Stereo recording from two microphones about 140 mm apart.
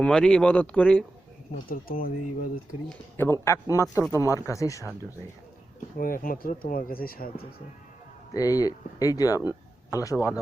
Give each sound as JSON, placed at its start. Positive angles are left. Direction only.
{"t": 0.0, "sound": "speech", "side_deg": 5}
{"t": 1.7, "sound": "speech", "side_deg": 90}
{"t": 3.2, "sound": "speech", "side_deg": 20}
{"t": 6.0, "sound": "speech", "side_deg": 90}
{"t": 8.3, "sound": "speech", "side_deg": 25}